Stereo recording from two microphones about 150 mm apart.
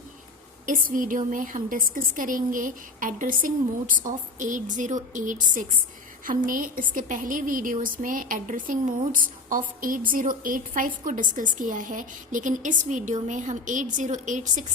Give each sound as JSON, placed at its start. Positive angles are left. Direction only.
{"t": 0.6, "sound": "a woman's voice", "side_deg": -65}